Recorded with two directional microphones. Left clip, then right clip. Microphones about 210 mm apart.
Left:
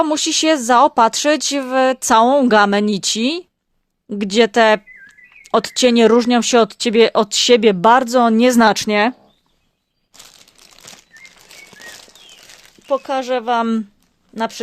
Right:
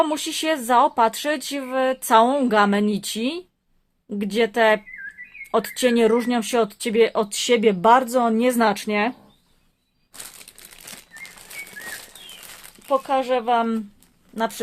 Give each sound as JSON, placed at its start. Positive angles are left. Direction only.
{"t": 0.0, "sound": "speech", "side_deg": 45}
{"t": 12.9, "sound": "speech", "side_deg": 50}